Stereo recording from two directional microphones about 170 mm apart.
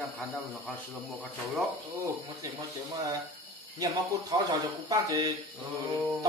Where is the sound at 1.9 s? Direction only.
20° right (ahead or behind).